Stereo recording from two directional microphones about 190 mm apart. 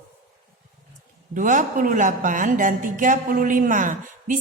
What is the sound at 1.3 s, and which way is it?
A woman's voice, 40° right (ahead or behind).